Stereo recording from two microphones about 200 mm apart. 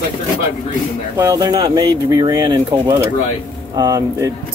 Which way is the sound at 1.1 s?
15° right (ahead or behind).